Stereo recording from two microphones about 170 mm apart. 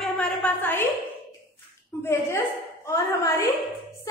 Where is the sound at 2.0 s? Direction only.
15° left (ahead or behind).